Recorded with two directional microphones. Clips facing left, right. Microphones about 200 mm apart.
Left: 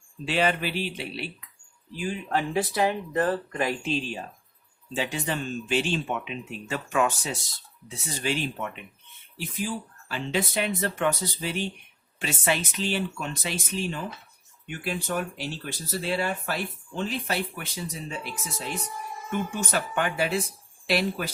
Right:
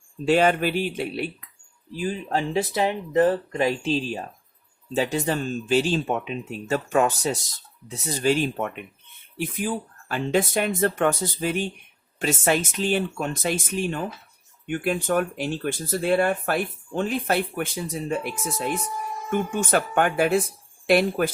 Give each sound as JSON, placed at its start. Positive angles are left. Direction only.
{"t": 0.3, "sound": "speech", "side_deg": -50}
{"t": 2.0, "sound": "speech", "side_deg": -35}